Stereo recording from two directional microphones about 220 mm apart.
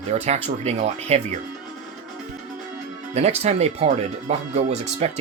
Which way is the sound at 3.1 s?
30° right (ahead or behind).